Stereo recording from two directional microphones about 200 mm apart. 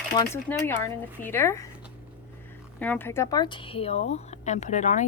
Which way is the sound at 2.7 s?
5° left (ahead or behind).